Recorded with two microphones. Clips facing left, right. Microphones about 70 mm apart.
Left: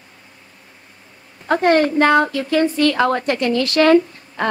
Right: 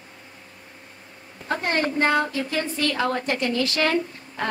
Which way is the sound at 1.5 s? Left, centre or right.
Left.